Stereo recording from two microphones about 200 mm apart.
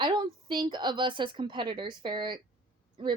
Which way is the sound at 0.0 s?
20° right (ahead or behind).